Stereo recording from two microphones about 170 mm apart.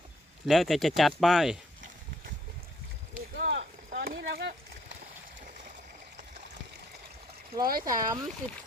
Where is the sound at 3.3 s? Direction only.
80° right.